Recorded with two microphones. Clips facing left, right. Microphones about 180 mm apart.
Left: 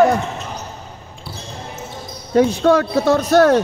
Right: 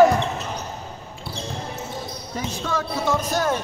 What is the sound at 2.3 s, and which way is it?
Speech, 70° left (ahead or behind).